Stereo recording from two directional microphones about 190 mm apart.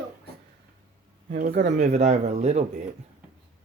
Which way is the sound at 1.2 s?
45° right (ahead or behind).